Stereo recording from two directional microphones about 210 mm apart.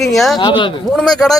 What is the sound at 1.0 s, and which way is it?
Speech, centre (ahead or behind).